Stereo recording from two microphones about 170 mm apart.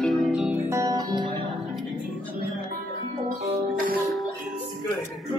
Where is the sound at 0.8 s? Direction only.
25° right (ahead or behind).